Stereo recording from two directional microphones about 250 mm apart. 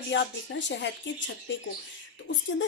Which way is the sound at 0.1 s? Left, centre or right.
Left.